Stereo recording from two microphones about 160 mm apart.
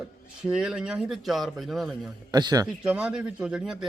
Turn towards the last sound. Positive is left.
turn(degrees=-5)  # may be behind; listen again after turning